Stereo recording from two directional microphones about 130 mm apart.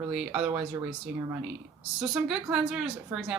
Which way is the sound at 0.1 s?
5° right (ahead or behind).